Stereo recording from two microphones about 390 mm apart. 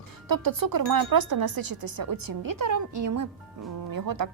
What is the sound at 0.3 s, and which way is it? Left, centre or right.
Speech, right.